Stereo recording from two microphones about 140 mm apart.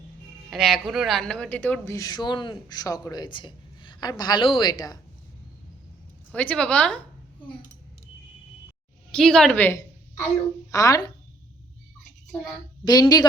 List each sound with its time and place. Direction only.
0.5 s speech: centre (ahead or behind); by 4.9 s 25° left (ahead or behind)
6.3 s a woman's voice: 10° left (ahead or behind)
9.1 s a woman's voice: 5° left (ahead or behind)
10.7 s speech: 25° left (ahead or behind)
12.8 s speech: 30° left (ahead or behind)